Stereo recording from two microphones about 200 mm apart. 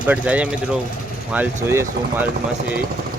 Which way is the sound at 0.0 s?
5° right (ahead or behind).